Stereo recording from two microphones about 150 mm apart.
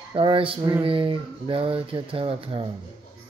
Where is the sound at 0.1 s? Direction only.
35° right (ahead or behind).